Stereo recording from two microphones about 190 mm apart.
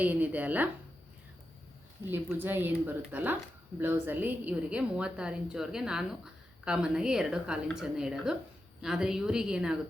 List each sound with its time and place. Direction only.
0.0 s speech: 10° right (ahead or behind)
2.0 s a woman's voice: 10° right (ahead or behind)